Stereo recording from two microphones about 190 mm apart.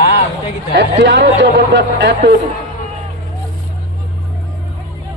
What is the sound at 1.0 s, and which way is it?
Speech, 75° right (ahead or behind).